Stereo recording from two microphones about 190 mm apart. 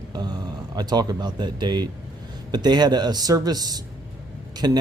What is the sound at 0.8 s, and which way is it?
A man's voice, 20° right (ahead or behind).